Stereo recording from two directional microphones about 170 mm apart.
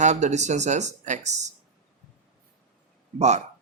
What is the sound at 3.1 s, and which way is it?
Speech, 40° right (ahead or behind).